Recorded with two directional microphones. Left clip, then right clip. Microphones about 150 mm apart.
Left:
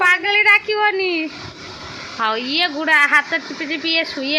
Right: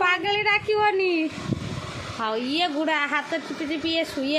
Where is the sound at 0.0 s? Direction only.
10° right (ahead or behind).